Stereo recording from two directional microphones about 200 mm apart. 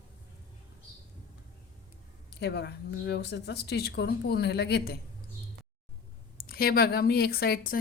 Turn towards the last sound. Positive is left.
turn(degrees=50)  # may be behind; listen again after turning